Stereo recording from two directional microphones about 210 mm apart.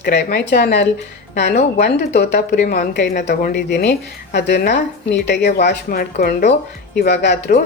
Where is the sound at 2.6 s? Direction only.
35° left (ahead or behind).